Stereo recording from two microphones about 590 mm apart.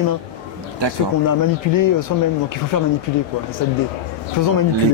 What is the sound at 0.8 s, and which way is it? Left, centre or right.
Speech, right.